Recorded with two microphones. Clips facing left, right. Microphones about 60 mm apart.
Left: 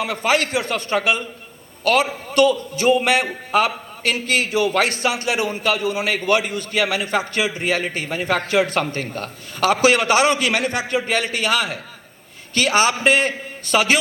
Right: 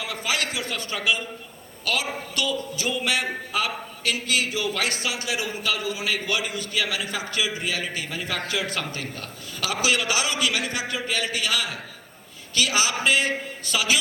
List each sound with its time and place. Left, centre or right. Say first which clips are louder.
0.0 s a man's voice: left 8 dB; left